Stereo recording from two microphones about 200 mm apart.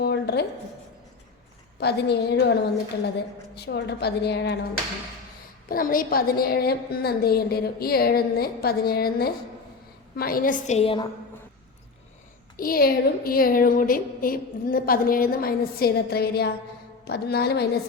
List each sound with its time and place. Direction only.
0.0 s a sound: 55° left (ahead or behind)
1.8 s a woman's voice: 55° left (ahead or behind)
5.6 s a woman's voice: 45° left (ahead or behind); by 11.0 s 30° left (ahead or behind)
12.5 s a woman's voice: 45° left (ahead or behind)